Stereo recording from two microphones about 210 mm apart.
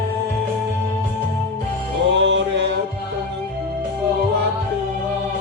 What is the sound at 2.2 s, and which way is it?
Music, 55° right (ahead or behind).